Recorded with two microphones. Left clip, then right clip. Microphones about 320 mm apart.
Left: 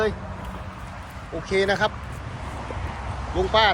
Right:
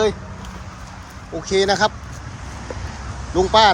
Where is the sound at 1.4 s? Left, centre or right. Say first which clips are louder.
Right 5 dB; centre.